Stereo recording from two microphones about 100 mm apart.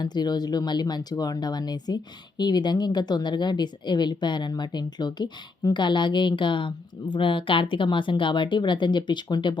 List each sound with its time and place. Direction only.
0.0 s speech: 45° left (ahead or behind)